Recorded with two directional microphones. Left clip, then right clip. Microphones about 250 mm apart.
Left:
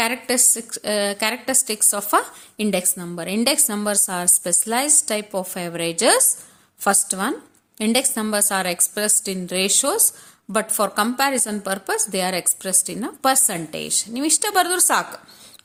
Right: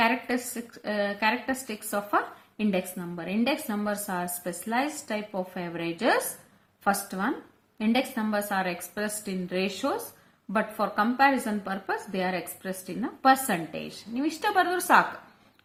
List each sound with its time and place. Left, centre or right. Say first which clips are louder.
0.0 s a woman's voice: left 5 dB; left